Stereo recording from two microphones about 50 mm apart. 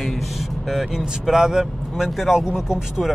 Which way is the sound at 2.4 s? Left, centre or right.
Centre.